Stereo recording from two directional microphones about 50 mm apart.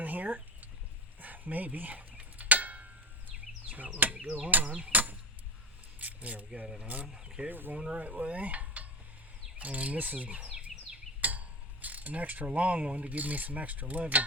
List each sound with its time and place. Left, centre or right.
0.0 s a sound: right
3.9 s speech: right
7.1 s speech: centre
7.4 s speech: right
7.9 s cutlery: right
9.6 s speech: right